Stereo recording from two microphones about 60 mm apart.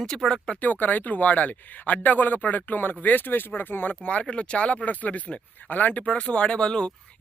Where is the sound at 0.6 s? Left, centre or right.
Left.